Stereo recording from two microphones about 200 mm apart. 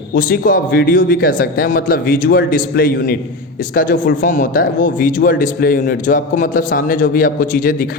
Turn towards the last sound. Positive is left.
turn(degrees=45)  # may be behind; listen again after turning